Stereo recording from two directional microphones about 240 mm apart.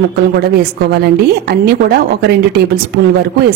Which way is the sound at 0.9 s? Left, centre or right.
Right.